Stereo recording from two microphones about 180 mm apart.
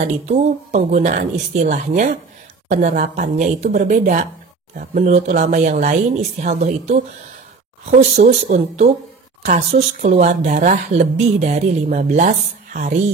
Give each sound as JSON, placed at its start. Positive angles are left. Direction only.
{"t": 0.0, "sound": "speech", "side_deg": -35}